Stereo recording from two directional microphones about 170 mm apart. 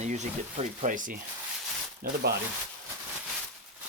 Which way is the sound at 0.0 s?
45° right (ahead or behind).